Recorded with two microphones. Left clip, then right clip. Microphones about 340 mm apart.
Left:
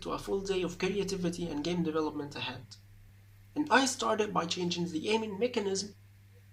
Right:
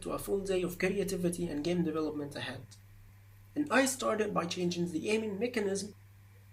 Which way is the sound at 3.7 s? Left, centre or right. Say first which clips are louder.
Left 2 dB; centre.